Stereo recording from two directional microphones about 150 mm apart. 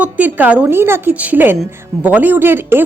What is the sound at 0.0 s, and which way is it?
Speech, 10° right (ahead or behind).